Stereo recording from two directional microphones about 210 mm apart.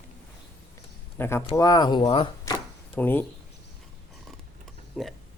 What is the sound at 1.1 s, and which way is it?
Speech, 10° left (ahead or behind).